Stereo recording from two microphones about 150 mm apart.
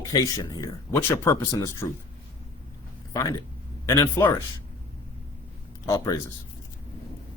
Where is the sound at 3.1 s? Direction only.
25° left (ahead or behind).